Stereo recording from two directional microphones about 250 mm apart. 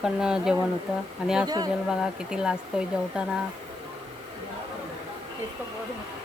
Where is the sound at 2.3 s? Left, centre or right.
Centre.